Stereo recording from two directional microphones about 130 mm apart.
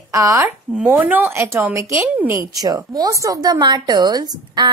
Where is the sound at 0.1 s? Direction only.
20° right (ahead or behind).